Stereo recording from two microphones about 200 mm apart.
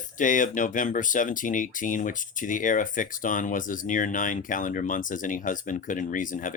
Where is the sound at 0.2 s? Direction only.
40° left (ahead or behind).